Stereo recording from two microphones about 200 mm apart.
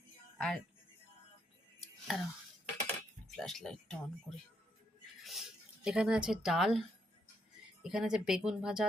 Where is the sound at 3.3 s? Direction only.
Centre (ahead or behind).